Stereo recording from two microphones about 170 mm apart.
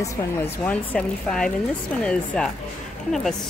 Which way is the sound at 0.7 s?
5° left (ahead or behind).